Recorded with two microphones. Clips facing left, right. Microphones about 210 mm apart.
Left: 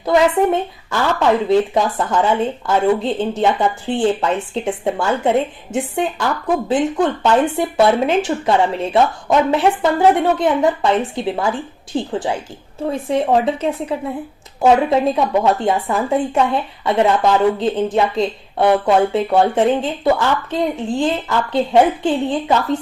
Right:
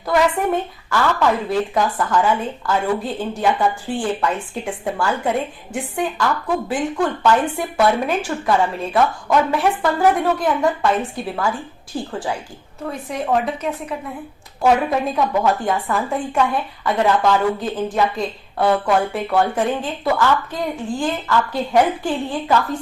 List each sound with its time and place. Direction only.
0.0 s a woman's voice: 20° left (ahead or behind)